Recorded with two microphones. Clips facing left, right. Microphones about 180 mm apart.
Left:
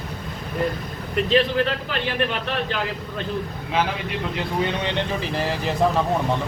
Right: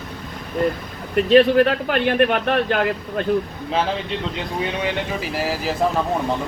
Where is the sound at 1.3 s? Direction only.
55° right (ahead or behind).